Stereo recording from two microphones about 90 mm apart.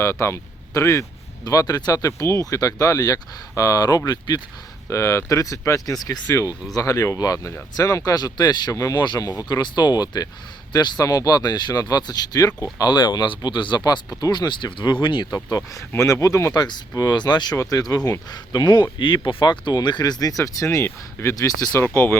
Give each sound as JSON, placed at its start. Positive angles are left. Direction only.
{"t": 0.0, "sound": "speech", "side_deg": 30}
{"t": 4.9, "sound": "speech", "side_deg": 35}
{"t": 6.2, "sound": "speech", "side_deg": 30}
{"t": 8.7, "sound": "speech", "side_deg": 40}
{"t": 15.4, "sound": "speech", "side_deg": 40}
{"t": 17.6, "sound": "speech", "side_deg": 40}
{"t": 21.3, "sound": "speech", "side_deg": 45}
{"t": 21.8, "sound": "speech", "side_deg": 20}